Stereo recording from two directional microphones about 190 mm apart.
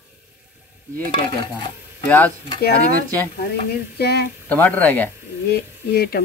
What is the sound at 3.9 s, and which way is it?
Speech, 55° left (ahead or behind).